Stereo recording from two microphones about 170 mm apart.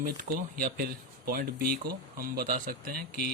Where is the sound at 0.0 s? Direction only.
55° right (ahead or behind).